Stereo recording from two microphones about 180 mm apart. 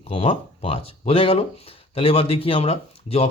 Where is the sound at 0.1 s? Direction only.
30° left (ahead or behind).